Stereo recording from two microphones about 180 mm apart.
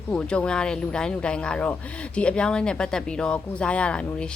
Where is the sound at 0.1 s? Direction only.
5° left (ahead or behind).